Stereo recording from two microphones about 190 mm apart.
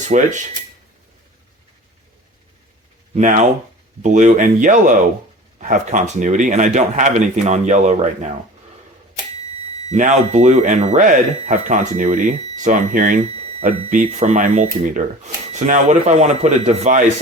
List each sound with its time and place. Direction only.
0.1 s speech: 40° right (ahead or behind)
3.2 s speech: 40° right (ahead or behind)
9.9 s speech: 40° right (ahead or behind)